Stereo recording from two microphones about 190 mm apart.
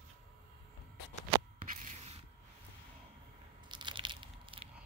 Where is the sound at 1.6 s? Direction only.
45° right (ahead or behind).